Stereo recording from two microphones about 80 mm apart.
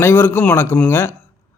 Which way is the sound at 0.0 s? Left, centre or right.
Left.